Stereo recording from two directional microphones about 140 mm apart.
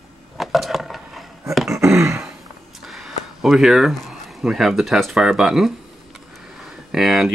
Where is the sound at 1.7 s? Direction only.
20° right (ahead or behind).